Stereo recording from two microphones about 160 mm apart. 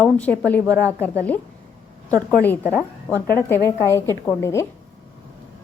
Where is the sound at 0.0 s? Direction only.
10° left (ahead or behind).